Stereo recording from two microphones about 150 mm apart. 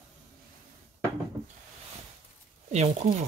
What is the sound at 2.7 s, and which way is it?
Speech, 50° right (ahead or behind).